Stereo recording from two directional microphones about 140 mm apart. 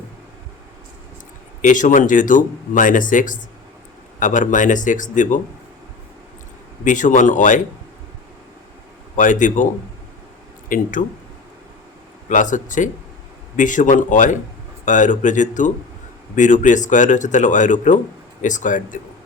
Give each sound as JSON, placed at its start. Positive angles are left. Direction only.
{"t": 1.6, "sound": "speech", "side_deg": 65}
{"t": 6.8, "sound": "speech", "side_deg": 65}
{"t": 9.1, "sound": "speech", "side_deg": 65}
{"t": 10.7, "sound": "speech", "side_deg": 75}
{"t": 12.3, "sound": "speech", "side_deg": 65}